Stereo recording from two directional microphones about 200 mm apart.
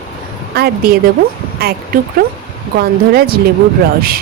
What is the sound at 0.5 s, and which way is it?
A woman's voice, 50° right (ahead or behind).